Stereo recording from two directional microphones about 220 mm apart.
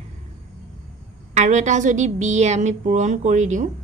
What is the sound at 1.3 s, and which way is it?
A woman's voice, 30° right (ahead or behind).